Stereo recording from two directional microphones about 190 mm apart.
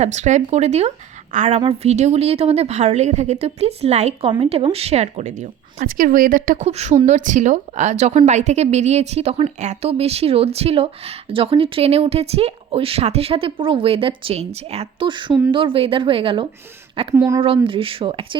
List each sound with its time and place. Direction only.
0.0 s speech: 40° right (ahead or behind)
17.2 s speech: 15° right (ahead or behind)
17.4 s speech: 30° right (ahead or behind)